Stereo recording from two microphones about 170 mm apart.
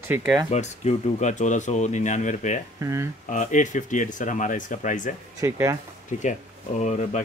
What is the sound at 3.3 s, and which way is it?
Speech, 45° left (ahead or behind).